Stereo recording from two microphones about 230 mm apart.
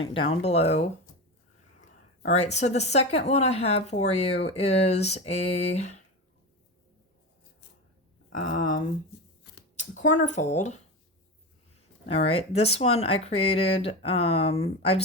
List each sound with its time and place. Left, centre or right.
0.0 s speech: left
2.2 s speech: left
8.3 s speech: left
10.2 s speech: left
12.0 s speech: left